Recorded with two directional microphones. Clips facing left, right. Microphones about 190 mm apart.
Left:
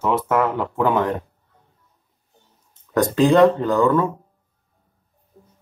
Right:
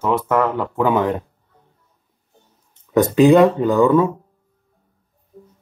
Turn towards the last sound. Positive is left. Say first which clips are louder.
# right 3 dB
turn(degrees=-10)  # may be behind; listen again after turning